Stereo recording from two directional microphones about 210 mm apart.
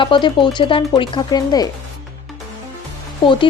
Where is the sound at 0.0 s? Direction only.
20° left (ahead or behind).